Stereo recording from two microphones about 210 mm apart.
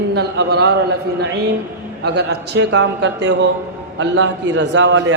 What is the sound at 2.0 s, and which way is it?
A man's voice, 50° right (ahead or behind).